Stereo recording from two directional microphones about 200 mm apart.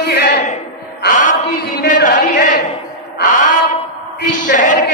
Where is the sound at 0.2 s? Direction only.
45° left (ahead or behind).